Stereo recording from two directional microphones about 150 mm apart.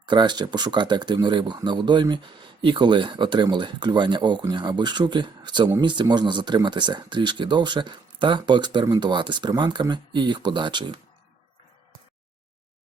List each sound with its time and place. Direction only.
0.0 s speech: 30° right (ahead or behind)